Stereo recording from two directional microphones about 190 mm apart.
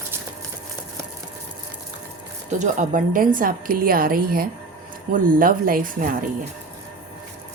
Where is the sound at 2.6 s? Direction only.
40° right (ahead or behind).